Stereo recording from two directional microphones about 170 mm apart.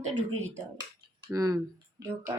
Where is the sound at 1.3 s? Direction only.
20° right (ahead or behind).